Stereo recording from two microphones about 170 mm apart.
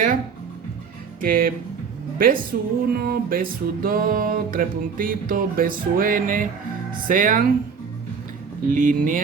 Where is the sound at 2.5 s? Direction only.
55° right (ahead or behind).